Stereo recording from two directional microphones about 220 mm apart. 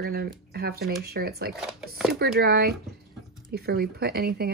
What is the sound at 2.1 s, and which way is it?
Speech, 45° right (ahead or behind).